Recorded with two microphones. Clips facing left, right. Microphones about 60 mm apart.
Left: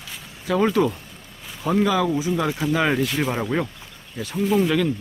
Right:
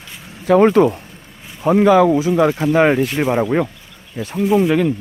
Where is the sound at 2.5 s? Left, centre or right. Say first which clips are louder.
Right 7 dB; right.